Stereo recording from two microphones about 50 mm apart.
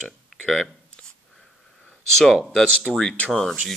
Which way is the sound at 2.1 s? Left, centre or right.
Centre.